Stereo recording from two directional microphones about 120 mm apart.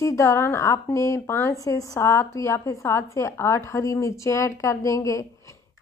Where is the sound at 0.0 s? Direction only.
25° left (ahead or behind).